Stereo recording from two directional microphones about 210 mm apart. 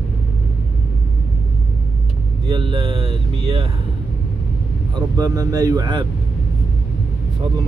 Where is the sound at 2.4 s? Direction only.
25° right (ahead or behind).